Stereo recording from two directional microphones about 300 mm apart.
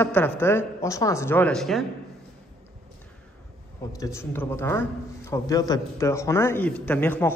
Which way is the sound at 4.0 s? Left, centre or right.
Centre.